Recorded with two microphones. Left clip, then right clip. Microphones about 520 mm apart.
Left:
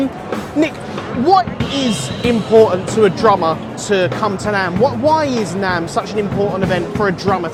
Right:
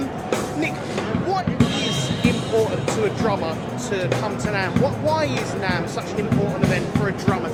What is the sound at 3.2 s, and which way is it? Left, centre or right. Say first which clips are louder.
Speech: left 10 dB; left.